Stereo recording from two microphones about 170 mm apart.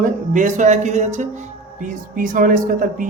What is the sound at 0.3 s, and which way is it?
Speech, 45° right (ahead or behind).